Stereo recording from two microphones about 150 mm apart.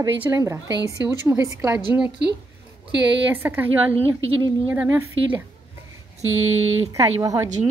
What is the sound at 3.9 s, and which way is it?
Speech, 40° right (ahead or behind).